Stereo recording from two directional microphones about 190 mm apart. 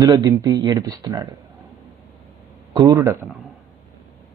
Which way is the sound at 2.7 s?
20° right (ahead or behind).